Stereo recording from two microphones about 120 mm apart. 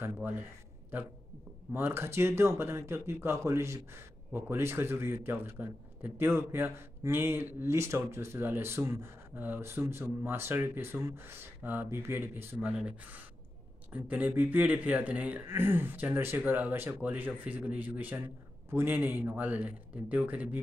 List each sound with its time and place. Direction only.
0.0 s speech: 15° right (ahead or behind)
1.7 s a man's voice: 20° right (ahead or behind)
12.6 s speech: 10° right (ahead or behind)